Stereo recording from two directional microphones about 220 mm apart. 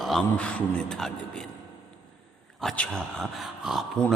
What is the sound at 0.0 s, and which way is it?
Speech, centre (ahead or behind).